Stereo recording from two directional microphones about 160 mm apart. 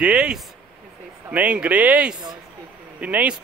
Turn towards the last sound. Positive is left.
turn(degrees=-10)  # may be behind; listen again after turning